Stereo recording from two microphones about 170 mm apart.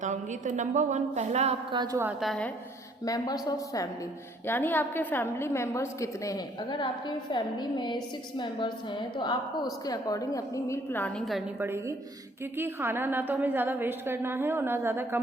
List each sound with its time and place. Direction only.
0.0 s a woman's voice: 45° right (ahead or behind)
1.7 s a woman's voice: 25° right (ahead or behind)
2.2 s a woman's voice: centre (ahead or behind)
3.0 s a woman's voice: 20° left (ahead or behind)
4.4 s a woman's voice: 10° left (ahead or behind)
11.6 s a woman's voice: 15° right (ahead or behind)